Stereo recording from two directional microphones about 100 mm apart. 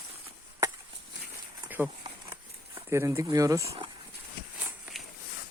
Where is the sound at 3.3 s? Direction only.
35° right (ahead or behind).